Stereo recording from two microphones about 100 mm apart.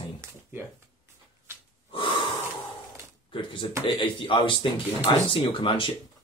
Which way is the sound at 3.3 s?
60° left (ahead or behind).